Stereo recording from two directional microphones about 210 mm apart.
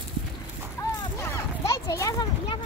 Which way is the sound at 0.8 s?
15° left (ahead or behind).